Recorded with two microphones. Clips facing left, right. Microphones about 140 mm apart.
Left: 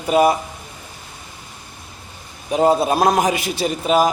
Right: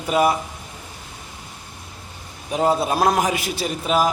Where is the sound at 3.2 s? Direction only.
5° right (ahead or behind).